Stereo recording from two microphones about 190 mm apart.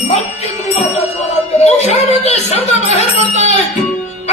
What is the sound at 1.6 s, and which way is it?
Speech, 35° left (ahead or behind).